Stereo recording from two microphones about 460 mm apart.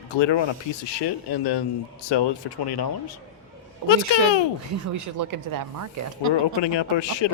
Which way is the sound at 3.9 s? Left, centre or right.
Left.